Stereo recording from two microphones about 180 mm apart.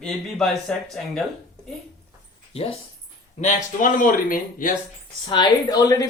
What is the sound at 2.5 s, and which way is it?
Speech, 35° left (ahead or behind).